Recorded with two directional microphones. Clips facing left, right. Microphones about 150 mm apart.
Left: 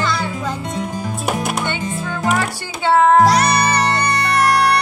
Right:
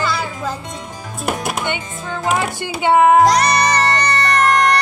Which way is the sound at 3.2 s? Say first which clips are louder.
Even; 5° left (ahead or behind).